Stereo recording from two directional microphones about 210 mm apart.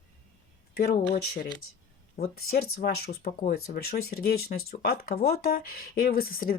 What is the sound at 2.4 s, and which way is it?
Speech, 45° left (ahead or behind).